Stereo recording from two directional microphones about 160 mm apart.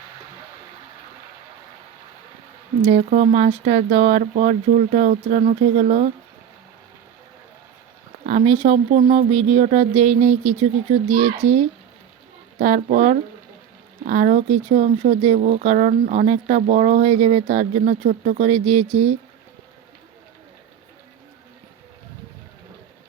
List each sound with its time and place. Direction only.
2.8 s speech: 45° right (ahead or behind)
8.3 s speech: 45° right (ahead or behind)
9.1 s speech: 40° right (ahead or behind)